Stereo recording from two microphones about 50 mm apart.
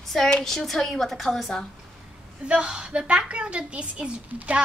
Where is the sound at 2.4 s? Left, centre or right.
Right.